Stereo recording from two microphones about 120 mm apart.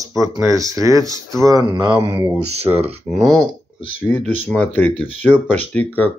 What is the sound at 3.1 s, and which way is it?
Speech, centre (ahead or behind).